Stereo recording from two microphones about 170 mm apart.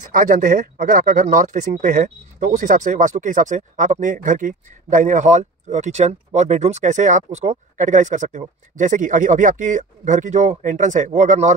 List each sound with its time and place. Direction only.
0.1 s speech: 55° right (ahead or behind)